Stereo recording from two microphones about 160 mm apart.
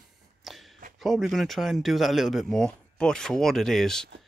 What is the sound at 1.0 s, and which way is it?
Speech, centre (ahead or behind).